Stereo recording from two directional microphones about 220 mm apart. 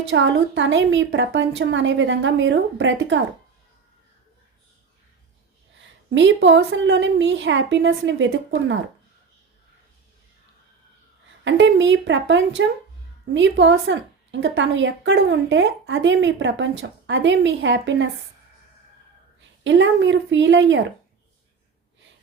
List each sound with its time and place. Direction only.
0.1 s a woman's voice: 55° right (ahead or behind)
5.8 s a woman's voice: 55° right (ahead or behind)
11.4 s a woman's voice: 55° right (ahead or behind)
19.6 s a woman's voice: 55° right (ahead or behind)